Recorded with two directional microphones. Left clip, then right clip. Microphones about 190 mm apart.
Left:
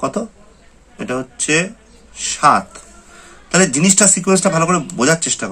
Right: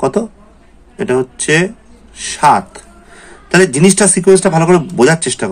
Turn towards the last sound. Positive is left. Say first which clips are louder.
# right 5 dB
turn(degrees=-25)  # may be behind; listen again after turning